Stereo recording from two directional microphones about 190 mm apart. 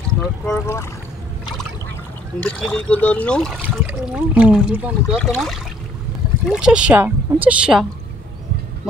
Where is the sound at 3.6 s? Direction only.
5° right (ahead or behind).